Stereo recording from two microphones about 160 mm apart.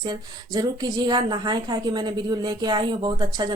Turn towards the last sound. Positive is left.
turn(degrees=-30)  # may be behind; listen again after turning